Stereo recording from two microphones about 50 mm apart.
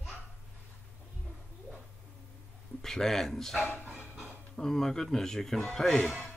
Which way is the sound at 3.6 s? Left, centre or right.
Left.